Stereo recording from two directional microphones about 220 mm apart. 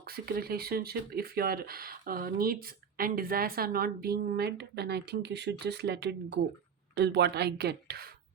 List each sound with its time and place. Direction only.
0.0 s speech: 45° right (ahead or behind)